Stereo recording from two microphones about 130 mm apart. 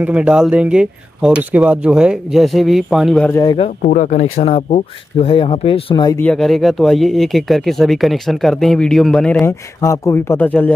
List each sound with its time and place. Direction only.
0.0 s speech: 10° right (ahead or behind)
3.5 s speech: 70° left (ahead or behind); by 6.1 s 40° left (ahead or behind)
6.1 s speech: 10° left (ahead or behind)
9.4 s speech: 20° left (ahead or behind)